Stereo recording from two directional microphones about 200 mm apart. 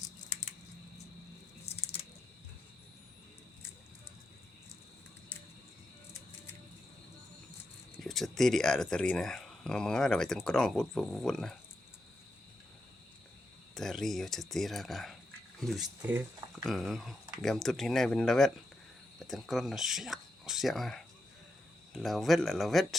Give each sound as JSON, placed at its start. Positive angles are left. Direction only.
{"t": 1.6, "sound": "a sound", "side_deg": 30}
{"t": 8.0, "sound": "speech", "side_deg": 0}
{"t": 13.7, "sound": "speech", "side_deg": 0}